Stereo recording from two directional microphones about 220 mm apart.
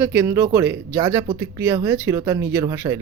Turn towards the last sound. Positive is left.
turn(degrees=-15)  # may be behind; listen again after turning